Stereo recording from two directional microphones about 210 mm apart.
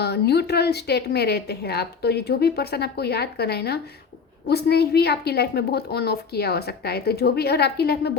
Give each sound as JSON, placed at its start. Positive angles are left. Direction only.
{"t": 0.0, "sound": "a woman's voice", "side_deg": 50}